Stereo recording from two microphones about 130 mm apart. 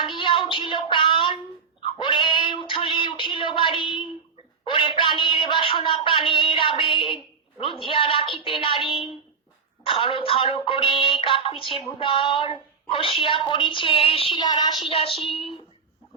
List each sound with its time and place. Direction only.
0.2 s a sound: 40° left (ahead or behind)
6.4 s music: 40° left (ahead or behind)
9.8 s music: 45° left (ahead or behind)